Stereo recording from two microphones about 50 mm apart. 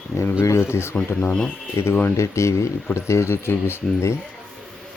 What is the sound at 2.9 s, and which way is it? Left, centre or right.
Speech, left.